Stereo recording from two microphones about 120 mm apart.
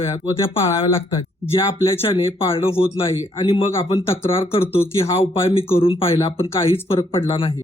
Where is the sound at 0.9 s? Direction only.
45° left (ahead or behind).